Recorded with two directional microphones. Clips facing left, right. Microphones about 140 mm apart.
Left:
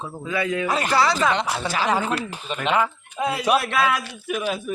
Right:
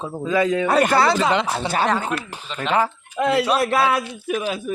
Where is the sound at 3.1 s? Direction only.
80° right.